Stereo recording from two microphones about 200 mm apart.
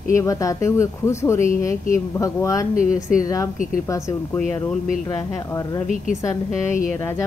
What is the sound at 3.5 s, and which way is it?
Speech, 40° left (ahead or behind).